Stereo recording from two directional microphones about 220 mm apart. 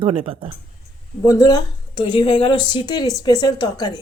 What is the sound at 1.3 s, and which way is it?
Speech, 15° left (ahead or behind).